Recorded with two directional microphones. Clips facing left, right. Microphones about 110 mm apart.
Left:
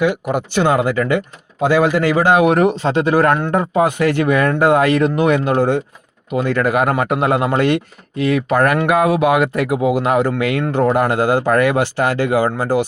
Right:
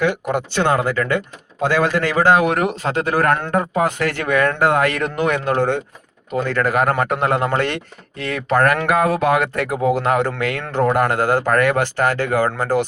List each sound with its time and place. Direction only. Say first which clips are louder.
0.0 s speech: left 2 dB; 15° left (ahead or behind)